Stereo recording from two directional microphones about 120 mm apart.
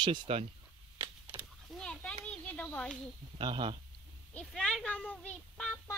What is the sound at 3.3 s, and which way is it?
Speech, 45° right (ahead or behind).